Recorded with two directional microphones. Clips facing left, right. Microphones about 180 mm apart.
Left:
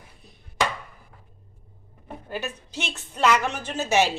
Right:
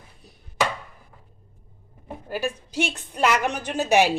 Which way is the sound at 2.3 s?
10° right (ahead or behind).